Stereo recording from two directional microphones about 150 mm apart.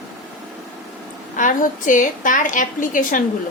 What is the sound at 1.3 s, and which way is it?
A woman's voice, 60° left (ahead or behind).